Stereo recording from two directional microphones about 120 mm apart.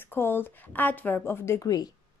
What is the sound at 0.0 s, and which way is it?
Speech, 20° left (ahead or behind).